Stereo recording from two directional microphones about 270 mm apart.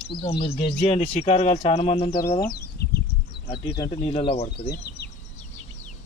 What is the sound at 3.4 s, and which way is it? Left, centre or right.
Speech, left.